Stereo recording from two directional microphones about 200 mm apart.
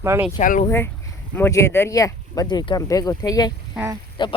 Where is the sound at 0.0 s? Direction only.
15° right (ahead or behind).